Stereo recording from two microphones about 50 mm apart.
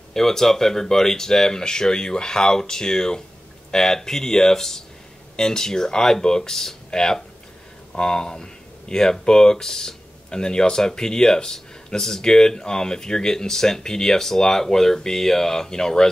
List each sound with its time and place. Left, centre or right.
0.1 s speech: centre